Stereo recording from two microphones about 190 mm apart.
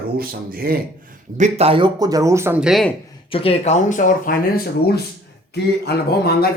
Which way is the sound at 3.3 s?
30° left (ahead or behind).